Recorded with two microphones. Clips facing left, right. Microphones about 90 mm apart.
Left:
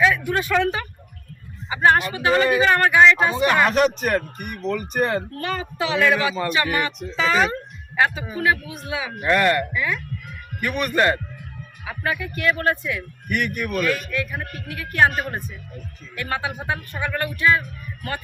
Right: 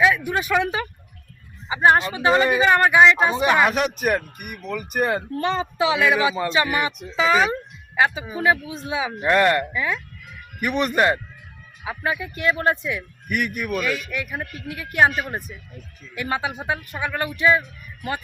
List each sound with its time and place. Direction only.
0.3 s speech: 15° right (ahead or behind)
5.4 s speech: 25° right (ahead or behind)
13.2 s speech: 5° right (ahead or behind)
14.1 s speech: 15° right (ahead or behind)